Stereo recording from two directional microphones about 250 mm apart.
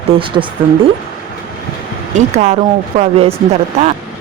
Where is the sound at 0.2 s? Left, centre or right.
Centre.